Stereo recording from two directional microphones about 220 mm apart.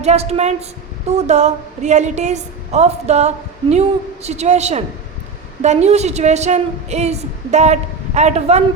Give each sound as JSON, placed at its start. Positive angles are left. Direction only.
{"t": 0.0, "sound": "a woman's voice", "side_deg": -30}